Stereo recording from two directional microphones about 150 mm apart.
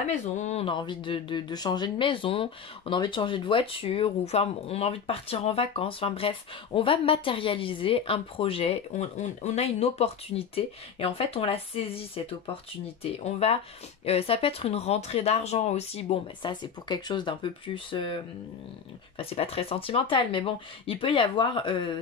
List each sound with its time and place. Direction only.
0.1 s speech: 50° left (ahead or behind)
0.7 s speech: 30° left (ahead or behind)
16.8 s speech: 30° left (ahead or behind)